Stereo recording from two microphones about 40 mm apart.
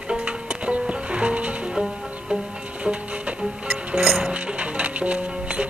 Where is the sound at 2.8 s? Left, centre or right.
Right.